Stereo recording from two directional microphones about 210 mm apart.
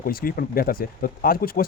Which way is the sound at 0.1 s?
45° left (ahead or behind).